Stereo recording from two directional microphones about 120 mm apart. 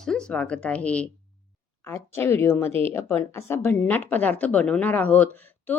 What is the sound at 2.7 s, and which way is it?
Speech, 55° right (ahead or behind).